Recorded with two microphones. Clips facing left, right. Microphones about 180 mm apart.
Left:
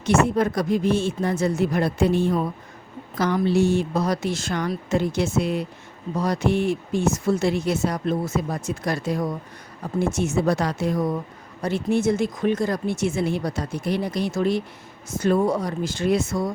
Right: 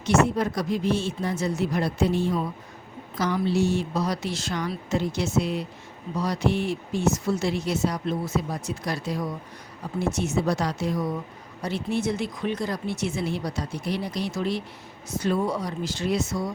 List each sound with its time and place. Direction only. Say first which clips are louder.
0.0 s speech: left 2 dB; 55° left (ahead or behind)